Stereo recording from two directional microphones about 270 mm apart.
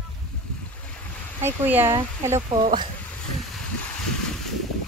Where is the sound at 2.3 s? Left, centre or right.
Centre.